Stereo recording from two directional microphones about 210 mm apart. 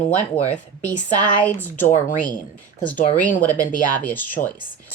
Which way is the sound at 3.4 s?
10° left (ahead or behind).